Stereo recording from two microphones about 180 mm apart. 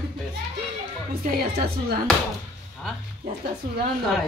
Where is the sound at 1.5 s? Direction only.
60° right (ahead or behind).